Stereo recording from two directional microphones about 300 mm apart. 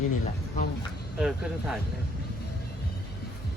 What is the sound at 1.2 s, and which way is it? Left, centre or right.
Speech, centre.